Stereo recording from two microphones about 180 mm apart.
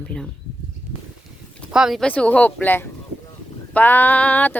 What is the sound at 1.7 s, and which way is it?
Speech, centre (ahead or behind).